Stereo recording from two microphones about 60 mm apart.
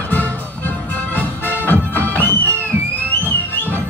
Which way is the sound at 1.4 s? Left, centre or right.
Right.